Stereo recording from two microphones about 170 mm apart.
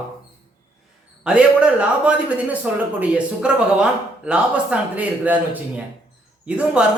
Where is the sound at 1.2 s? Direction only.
5° right (ahead or behind).